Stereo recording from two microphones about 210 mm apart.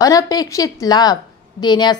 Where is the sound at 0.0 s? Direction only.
15° left (ahead or behind).